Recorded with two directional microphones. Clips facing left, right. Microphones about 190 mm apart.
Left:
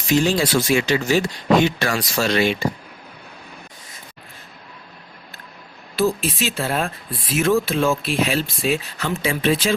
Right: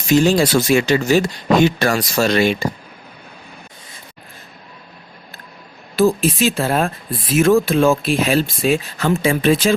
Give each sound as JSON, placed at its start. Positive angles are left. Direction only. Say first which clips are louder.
{"t": 0.1, "sound": "speech", "louder": "right 4 dB", "side_deg": -45}
{"t": 6.0, "sound": "speech", "louder": "right 6 dB", "side_deg": -45}